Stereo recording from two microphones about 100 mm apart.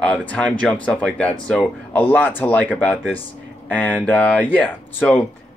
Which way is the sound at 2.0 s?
20° left (ahead or behind).